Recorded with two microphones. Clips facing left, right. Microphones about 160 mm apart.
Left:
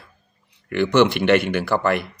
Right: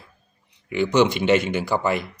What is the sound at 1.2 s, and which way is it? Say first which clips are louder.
Speech: left 2 dB; 65° left (ahead or behind).